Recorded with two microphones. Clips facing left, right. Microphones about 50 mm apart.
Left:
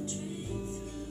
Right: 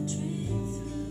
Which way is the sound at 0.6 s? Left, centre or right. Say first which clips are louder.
Right 4 dB; centre.